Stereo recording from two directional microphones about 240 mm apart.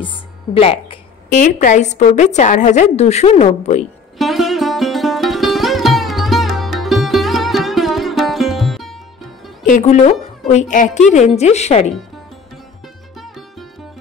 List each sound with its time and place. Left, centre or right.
0.0 s a woman's voice: left
4.2 s sitar: centre
9.7 s a woman's voice: left